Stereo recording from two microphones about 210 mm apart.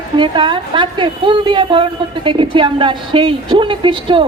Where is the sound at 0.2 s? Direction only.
25° right (ahead or behind).